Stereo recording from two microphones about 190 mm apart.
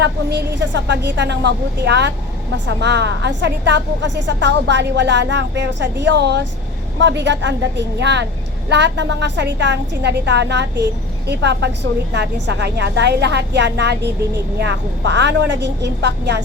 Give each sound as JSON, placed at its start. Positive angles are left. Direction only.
{"t": 0.0, "sound": "a woman's voice", "side_deg": -65}